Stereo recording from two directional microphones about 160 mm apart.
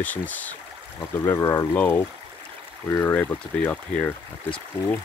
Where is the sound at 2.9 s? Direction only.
10° left (ahead or behind).